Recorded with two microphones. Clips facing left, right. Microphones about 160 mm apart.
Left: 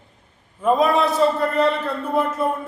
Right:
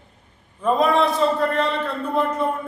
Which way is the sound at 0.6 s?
5° left (ahead or behind).